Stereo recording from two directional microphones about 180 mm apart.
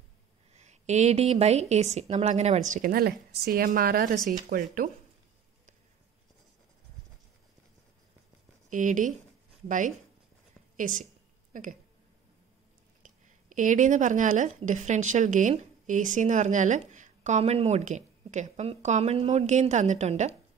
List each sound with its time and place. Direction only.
0.5 s a woman's voice: 40° right (ahead or behind)
8.6 s a woman's voice: 45° right (ahead or behind)
13.0 s a woman's voice: 45° right (ahead or behind)